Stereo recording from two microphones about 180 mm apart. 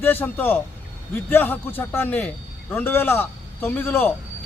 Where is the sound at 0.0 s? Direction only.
10° left (ahead or behind).